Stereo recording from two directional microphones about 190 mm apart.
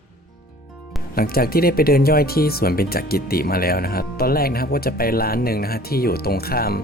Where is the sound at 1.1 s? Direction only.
50° left (ahead or behind).